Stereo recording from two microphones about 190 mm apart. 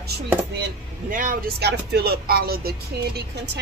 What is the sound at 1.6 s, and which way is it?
Speech, 60° right (ahead or behind).